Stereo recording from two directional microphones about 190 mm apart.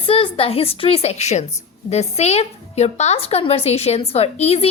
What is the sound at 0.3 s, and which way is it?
A woman's voice, 30° left (ahead or behind).